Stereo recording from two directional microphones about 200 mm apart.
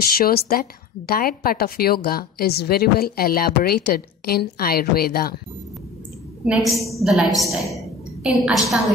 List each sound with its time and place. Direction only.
0.1 s a woman's voice: 50° left (ahead or behind)
6.4 s a woman's voice: 5° right (ahead or behind)